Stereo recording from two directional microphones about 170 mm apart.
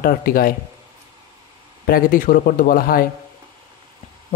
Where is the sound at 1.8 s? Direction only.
55° left (ahead or behind).